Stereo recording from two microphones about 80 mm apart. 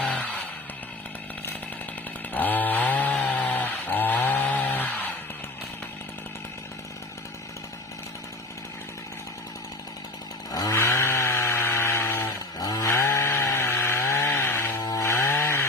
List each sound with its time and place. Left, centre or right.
0.0 s a sound: centre
2.3 s chainsaw: left
10.5 s chainsaw: left
10.8 s chainsaw: left
12.5 s chainsaw: left
12.9 s chainsaw: left